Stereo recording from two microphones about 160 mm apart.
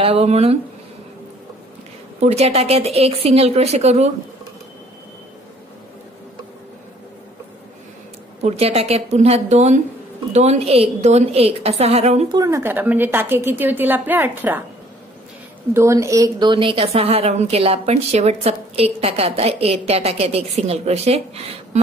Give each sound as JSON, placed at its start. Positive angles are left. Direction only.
{"t": 0.0, "sound": "a woman's voice", "side_deg": -40}
{"t": 2.1, "sound": "a woman's voice", "side_deg": -40}
{"t": 8.4, "sound": "a woman's voice", "side_deg": -40}
{"t": 12.3, "sound": "a woman's voice", "side_deg": -20}
{"t": 15.7, "sound": "a woman's voice", "side_deg": -15}